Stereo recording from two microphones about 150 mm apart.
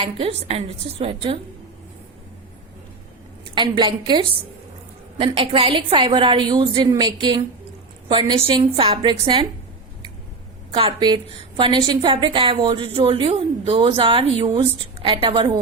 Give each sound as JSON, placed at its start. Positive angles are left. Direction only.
{"t": 0.0, "sound": "a woman's voice", "side_deg": -40}
{"t": 3.5, "sound": "a woman's voice", "side_deg": -30}
{"t": 10.8, "sound": "a woman's voice", "side_deg": -35}